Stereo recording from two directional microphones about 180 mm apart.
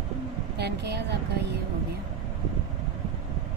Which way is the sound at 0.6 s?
65° right (ahead or behind).